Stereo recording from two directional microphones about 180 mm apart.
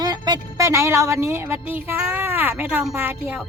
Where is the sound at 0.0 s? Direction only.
20° right (ahead or behind).